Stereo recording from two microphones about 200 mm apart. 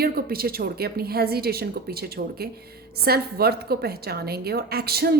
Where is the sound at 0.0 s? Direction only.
50° right (ahead or behind).